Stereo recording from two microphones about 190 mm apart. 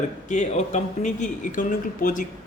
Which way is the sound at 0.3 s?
35° left (ahead or behind).